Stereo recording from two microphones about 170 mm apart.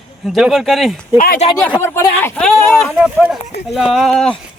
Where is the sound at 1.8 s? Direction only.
15° left (ahead or behind).